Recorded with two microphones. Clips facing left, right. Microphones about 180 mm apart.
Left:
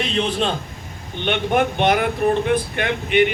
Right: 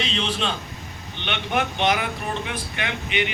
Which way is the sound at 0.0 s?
50° left (ahead or behind).